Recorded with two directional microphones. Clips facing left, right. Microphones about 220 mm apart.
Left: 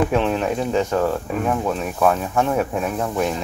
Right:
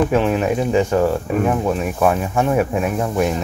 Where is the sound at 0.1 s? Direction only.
5° right (ahead or behind).